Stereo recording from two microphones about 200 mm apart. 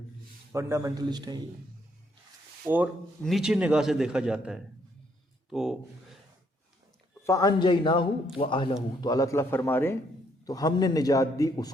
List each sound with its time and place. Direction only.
0.5 s a man's voice: 15° right (ahead or behind)
2.6 s a man's voice: 5° right (ahead or behind)
7.3 s a man's voice: 15° left (ahead or behind)